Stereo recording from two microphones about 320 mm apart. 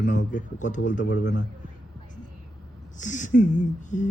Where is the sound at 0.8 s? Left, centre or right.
Left.